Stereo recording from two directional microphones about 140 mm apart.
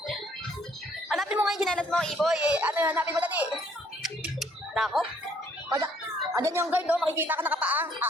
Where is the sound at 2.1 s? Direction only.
5° right (ahead or behind).